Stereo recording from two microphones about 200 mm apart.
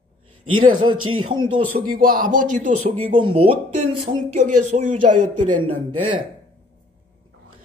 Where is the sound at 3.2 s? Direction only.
25° right (ahead or behind).